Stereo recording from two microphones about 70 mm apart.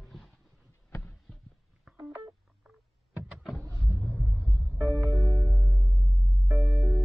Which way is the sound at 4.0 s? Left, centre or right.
Centre.